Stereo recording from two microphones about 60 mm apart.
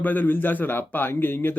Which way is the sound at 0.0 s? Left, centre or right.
Left.